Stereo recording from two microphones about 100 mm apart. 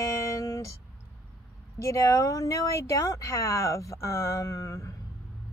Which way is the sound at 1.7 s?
30° left (ahead or behind).